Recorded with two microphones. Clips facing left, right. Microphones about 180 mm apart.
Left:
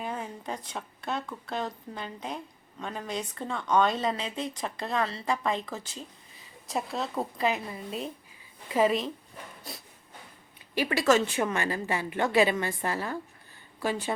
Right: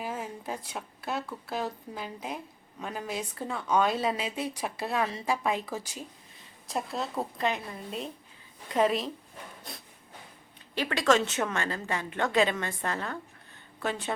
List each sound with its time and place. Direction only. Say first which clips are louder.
0.0 s a woman's voice: even; 5° right (ahead or behind)
6.3 s a woman's voice: left 1 dB; centre (ahead or behind)